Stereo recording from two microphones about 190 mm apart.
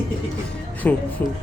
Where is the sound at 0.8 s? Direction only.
5° left (ahead or behind).